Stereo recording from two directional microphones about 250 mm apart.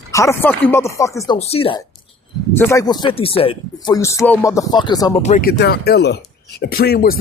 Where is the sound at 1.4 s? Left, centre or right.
Left.